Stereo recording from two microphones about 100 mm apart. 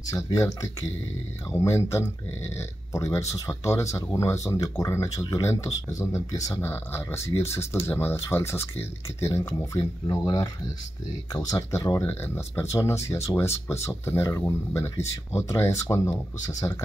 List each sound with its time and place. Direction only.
0.1 s speech: 35° left (ahead or behind)
9.8 s speech: 40° left (ahead or behind)
11.5 s speech: 30° left (ahead or behind)